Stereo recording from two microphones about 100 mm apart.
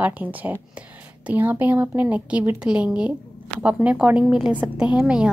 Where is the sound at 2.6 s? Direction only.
5° right (ahead or behind).